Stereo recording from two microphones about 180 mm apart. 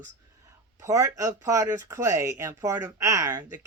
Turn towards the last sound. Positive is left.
turn(degrees=-15)  # may be behind; listen again after turning